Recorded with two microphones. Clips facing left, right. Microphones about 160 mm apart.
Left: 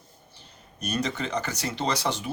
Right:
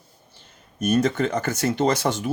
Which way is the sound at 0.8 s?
50° right (ahead or behind).